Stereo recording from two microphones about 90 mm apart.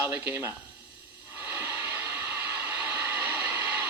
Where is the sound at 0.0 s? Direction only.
30° right (ahead or behind).